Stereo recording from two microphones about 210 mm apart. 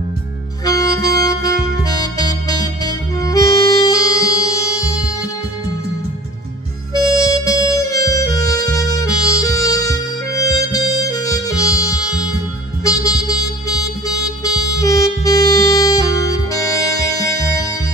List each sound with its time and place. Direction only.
0.7 s music: 15° left (ahead or behind)
6.9 s music: 15° left (ahead or behind)